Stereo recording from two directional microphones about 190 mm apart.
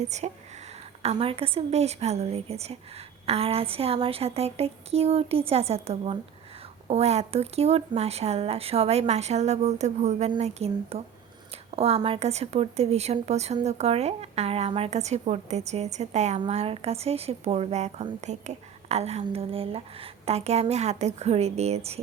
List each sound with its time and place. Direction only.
0.0 s a woman's voice: 35° right (ahead or behind)